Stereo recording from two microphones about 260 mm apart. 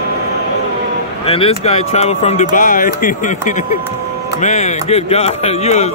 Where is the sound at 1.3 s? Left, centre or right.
Left.